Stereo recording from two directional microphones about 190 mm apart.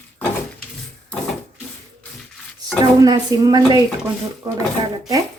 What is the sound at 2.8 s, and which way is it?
Speech, 20° right (ahead or behind).